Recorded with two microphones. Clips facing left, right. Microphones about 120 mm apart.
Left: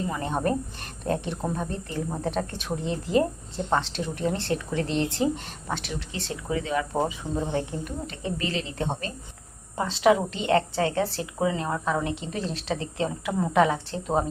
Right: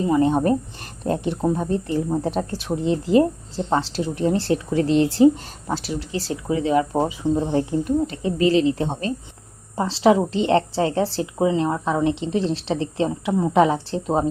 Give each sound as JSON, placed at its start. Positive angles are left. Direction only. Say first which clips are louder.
{"t": 0.1, "sound": "a woman's voice", "louder": "right 11 dB", "side_deg": -30}